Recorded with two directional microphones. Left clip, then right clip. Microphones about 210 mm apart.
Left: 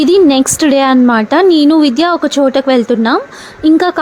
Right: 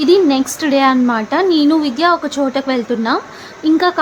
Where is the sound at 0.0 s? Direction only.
35° left (ahead or behind).